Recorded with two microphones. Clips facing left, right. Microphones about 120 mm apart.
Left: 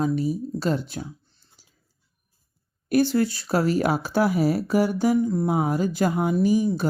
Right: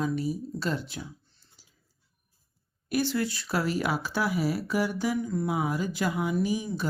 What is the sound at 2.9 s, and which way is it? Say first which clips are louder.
Speech: left 7 dB; 40° left (ahead or behind).